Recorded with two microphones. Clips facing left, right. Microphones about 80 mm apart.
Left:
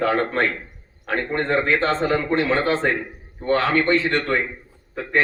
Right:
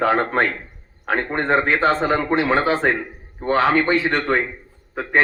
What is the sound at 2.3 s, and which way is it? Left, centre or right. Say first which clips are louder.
A man's voice: right 2 dB; centre.